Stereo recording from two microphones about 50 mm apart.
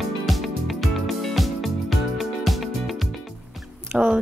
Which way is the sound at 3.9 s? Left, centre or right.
Centre.